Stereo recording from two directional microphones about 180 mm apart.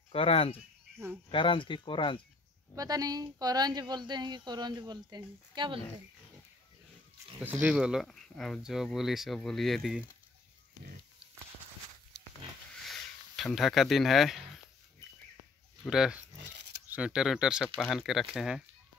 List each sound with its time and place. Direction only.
0.1 s speech: 30° left (ahead or behind)
2.7 s speech: 20° right (ahead or behind)
7.6 s speech: 5° right (ahead or behind)
12.8 s a sound: centre (ahead or behind)
15.9 s speech: 5° right (ahead or behind)